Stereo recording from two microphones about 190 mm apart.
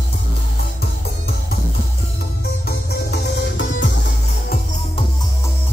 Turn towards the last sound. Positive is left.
turn(degrees=70)  # may be behind; listen again after turning